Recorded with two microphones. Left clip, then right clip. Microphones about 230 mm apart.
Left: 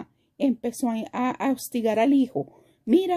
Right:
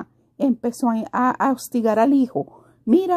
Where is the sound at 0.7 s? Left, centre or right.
Centre.